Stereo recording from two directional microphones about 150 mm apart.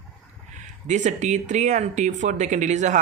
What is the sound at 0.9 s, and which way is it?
Speech, 55° right (ahead or behind).